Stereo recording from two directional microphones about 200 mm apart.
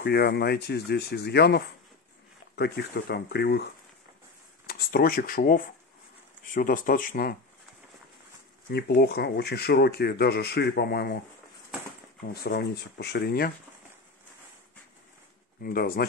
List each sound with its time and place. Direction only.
0.0 s speech: 50° left (ahead or behind)
4.6 s speech: 50° left (ahead or behind)
8.6 s speech: 55° left (ahead or behind)
12.3 s speech: 55° left (ahead or behind)
15.6 s speech: 50° left (ahead or behind)